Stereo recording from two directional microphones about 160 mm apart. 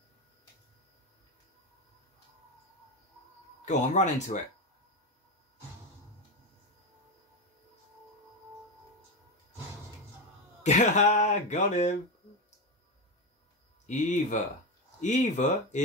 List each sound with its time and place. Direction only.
3.6 s speech: 45° left (ahead or behind)
10.6 s speech: 45° left (ahead or behind)
13.8 s speech: 50° left (ahead or behind)